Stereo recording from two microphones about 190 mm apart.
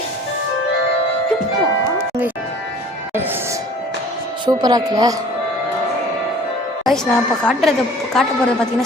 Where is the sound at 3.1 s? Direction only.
10° right (ahead or behind).